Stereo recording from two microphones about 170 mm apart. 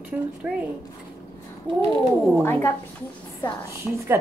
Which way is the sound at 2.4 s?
15° left (ahead or behind).